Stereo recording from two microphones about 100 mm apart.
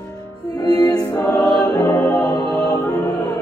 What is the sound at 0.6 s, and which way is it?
Music, 40° left (ahead or behind).